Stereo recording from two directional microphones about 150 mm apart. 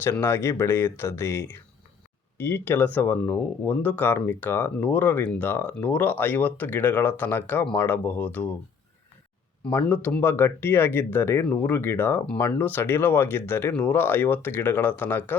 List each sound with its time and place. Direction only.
0.0 s speech: 15° left (ahead or behind)
9.6 s speech: 10° left (ahead or behind)